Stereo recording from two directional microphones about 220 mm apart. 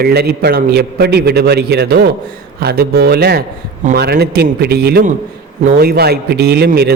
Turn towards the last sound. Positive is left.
turn(degrees=-45)  # may be behind; listen again after turning